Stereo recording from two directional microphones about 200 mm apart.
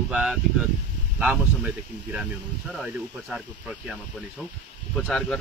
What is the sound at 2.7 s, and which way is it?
Speech, centre (ahead or behind).